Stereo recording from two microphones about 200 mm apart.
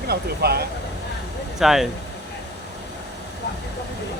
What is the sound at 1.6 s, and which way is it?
Speech, centre (ahead or behind).